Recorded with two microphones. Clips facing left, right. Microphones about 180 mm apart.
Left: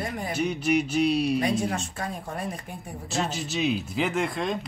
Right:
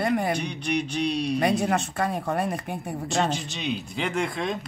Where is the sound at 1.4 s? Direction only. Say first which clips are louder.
Right 3 dB; 65° right (ahead or behind).